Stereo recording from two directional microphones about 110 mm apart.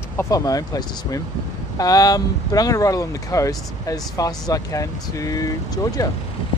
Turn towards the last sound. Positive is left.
turn(degrees=35)  # may be behind; listen again after turning